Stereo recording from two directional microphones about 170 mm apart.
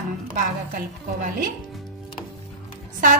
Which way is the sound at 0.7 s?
55° right (ahead or behind).